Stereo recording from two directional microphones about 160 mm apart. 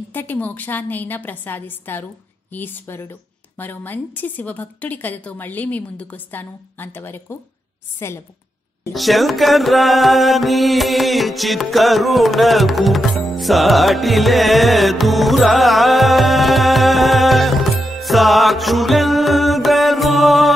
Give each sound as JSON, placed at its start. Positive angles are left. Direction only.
{"t": 0.1, "sound": "a woman's voice", "side_deg": 10}
{"t": 8.9, "sound": "music", "side_deg": 0}